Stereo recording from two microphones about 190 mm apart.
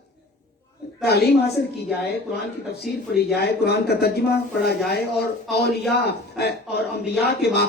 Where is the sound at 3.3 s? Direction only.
60° left (ahead or behind).